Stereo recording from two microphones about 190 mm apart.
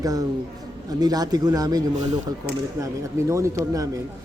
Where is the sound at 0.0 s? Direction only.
20° right (ahead or behind).